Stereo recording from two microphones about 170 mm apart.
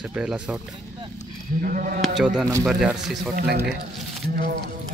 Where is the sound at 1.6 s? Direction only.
55° right (ahead or behind).